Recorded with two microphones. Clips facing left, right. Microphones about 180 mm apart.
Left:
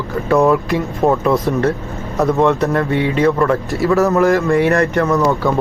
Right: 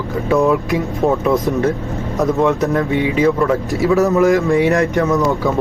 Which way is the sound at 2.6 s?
Centre (ahead or behind).